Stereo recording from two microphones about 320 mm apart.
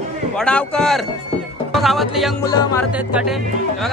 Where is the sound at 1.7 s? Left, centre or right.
Centre.